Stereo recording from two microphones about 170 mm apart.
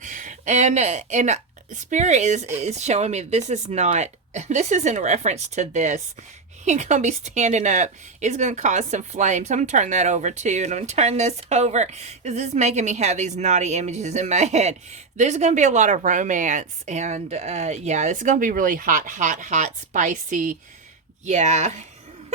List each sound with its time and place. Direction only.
0.0 s speech: 50° right (ahead or behind)